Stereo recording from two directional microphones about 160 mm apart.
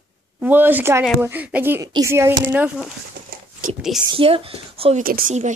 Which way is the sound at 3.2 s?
65° right (ahead or behind).